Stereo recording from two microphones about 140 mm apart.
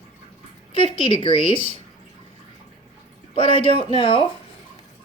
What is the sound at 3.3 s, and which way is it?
Speech, 40° left (ahead or behind).